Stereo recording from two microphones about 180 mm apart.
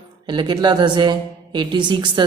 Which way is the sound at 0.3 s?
25° right (ahead or behind).